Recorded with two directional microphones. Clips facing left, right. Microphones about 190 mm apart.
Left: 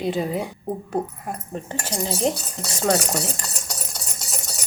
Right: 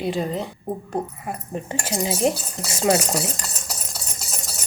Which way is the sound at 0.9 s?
5° right (ahead or behind).